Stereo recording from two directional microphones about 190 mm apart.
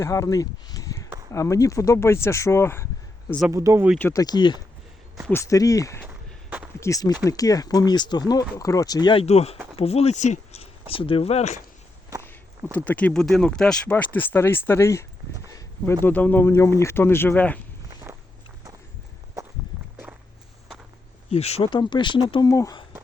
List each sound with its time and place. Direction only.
0.0 s speech: 15° left (ahead or behind)
3.5 s speech: 15° right (ahead or behind)
3.9 s speech: 10° left (ahead or behind)
4.2 s speech: 20° left (ahead or behind)
6.1 s walk: 5° right (ahead or behind)
6.7 s speech: 15° left (ahead or behind); by 11.6 s 35° left (ahead or behind)
12.7 s speech: 10° left (ahead or behind)
16.0 s speech: 10° left (ahead or behind)
18.1 s walk: 15° right (ahead or behind)
21.2 s speech: 35° left (ahead or behind)
22.4 s speech: 15° left (ahead or behind)